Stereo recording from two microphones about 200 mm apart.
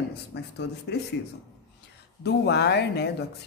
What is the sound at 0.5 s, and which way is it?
Speech, 55° left (ahead or behind).